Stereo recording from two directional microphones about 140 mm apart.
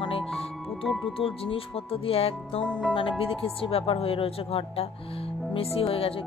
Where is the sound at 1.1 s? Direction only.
40° left (ahead or behind).